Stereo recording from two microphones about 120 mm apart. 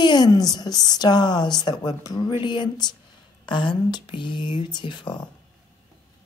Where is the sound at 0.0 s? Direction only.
35° left (ahead or behind).